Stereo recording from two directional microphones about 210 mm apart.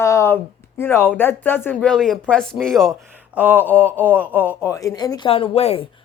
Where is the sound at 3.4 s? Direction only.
10° right (ahead or behind).